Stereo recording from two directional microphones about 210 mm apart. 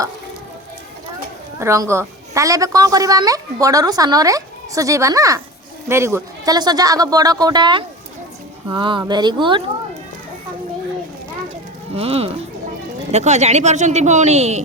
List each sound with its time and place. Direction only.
1.5 s a woman's voice: 15° right (ahead or behind)
11.9 s speech: 30° right (ahead or behind)